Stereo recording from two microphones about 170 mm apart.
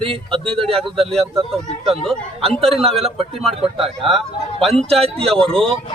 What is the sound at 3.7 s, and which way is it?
Speech, 35° right (ahead or behind).